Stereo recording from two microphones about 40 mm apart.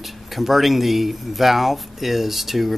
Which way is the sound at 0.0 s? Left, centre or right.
Centre.